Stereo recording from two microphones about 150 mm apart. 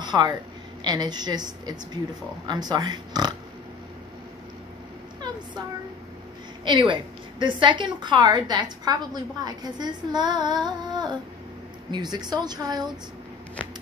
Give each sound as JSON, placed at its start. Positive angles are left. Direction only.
{"t": 0.0, "sound": "a sound", "side_deg": -30}
{"t": 0.8, "sound": "a woman's voice", "side_deg": -30}
{"t": 6.6, "sound": "a woman's voice", "side_deg": -30}